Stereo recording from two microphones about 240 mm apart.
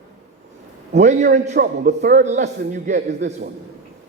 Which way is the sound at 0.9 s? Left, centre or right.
Right.